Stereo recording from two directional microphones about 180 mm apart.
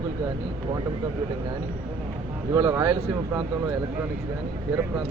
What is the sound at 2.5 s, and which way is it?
Speech, 15° right (ahead or behind).